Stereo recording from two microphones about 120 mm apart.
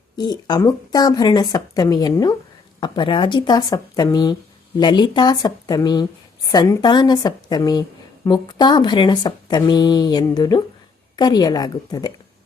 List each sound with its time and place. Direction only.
0.2 s a woman's voice: 35° left (ahead or behind)